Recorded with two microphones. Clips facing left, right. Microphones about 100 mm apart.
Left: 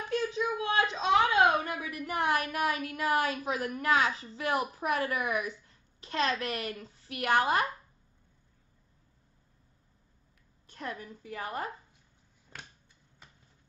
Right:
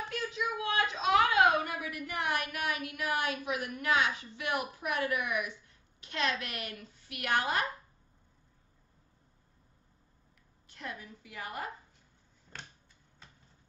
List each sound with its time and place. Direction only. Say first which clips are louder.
0.1 s a sound: left 8 dB; 30° left (ahead or behind)
1.6 s speech: left 1 dB; 30° left (ahead or behind)
10.7 s a woman's voice: left 4 dB; 40° left (ahead or behind)
12.5 s finger snapping: even; 10° left (ahead or behind)